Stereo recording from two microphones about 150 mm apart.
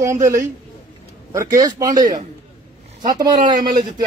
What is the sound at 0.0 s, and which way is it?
A man's voice, 20° right (ahead or behind).